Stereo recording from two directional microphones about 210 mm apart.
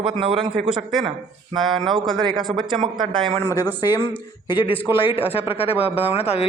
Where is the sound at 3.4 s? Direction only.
15° left (ahead or behind).